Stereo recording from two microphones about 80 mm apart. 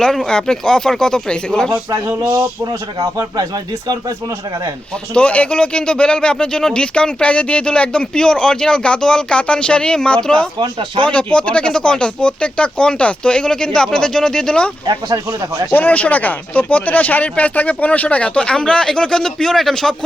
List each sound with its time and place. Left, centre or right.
0.0 s speech: centre
2.3 s speech: right
5.1 s speech: centre
10.6 s speech: right
11.0 s speech: centre
15.3 s speech: right
15.7 s speech: left; by 20.1 s centre